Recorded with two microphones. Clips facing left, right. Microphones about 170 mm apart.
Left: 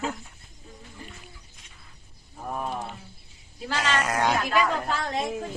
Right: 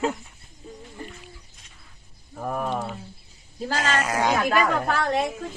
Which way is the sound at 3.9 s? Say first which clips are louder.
Right 1 dB; centre (ahead or behind).